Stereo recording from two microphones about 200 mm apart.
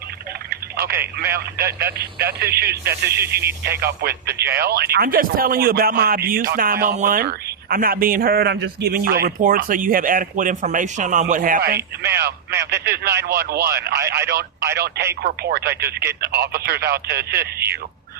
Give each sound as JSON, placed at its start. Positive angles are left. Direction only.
{"t": 0.5, "sound": "a sound", "side_deg": -50}
{"t": 1.8, "sound": "a man's voice", "side_deg": -50}
{"t": 11.8, "sound": "speech", "side_deg": -15}
{"t": 12.7, "sound": "a man's voice", "side_deg": -50}